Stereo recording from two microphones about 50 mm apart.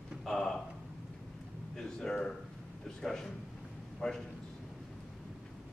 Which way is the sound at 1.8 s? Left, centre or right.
Centre.